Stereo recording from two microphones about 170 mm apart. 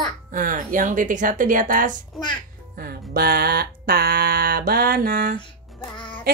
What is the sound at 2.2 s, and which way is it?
Speech, 25° left (ahead or behind).